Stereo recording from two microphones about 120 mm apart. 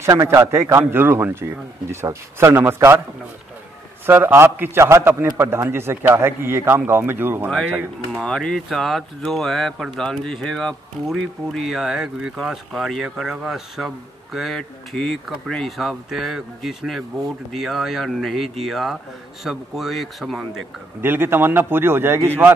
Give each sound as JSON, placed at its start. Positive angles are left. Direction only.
{"t": 0.0, "sound": "a man's voice", "side_deg": -25}
{"t": 4.0, "sound": "a man's voice", "side_deg": -20}
{"t": 8.2, "sound": "speech", "side_deg": 5}
{"t": 21.0, "sound": "a man's voice", "side_deg": -20}